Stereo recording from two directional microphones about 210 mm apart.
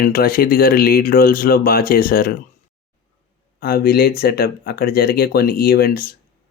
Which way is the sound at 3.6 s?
45° left (ahead or behind).